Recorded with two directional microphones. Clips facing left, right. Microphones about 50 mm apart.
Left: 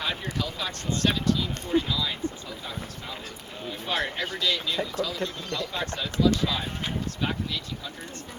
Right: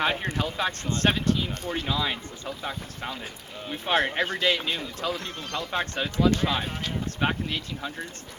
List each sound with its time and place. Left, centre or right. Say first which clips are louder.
0.0 s speech: right 4 dB; right
3.7 s speech: right 5 dB; right